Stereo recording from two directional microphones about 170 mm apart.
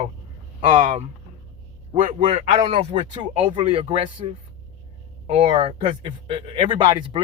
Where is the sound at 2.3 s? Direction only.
35° right (ahead or behind).